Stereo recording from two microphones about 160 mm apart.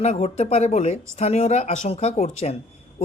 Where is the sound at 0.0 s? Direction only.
40° left (ahead or behind).